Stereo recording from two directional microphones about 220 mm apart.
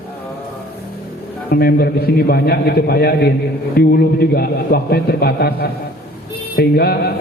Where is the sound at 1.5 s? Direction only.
45° left (ahead or behind).